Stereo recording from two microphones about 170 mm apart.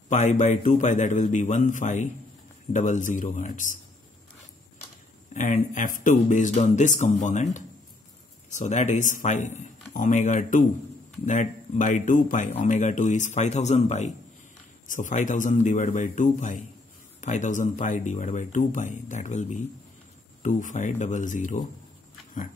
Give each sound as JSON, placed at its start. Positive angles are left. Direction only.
{"t": 0.1, "sound": "speech", "side_deg": 45}
{"t": 5.3, "sound": "speech", "side_deg": 45}